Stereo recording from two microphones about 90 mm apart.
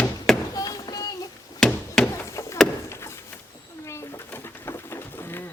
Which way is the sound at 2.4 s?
35° left (ahead or behind).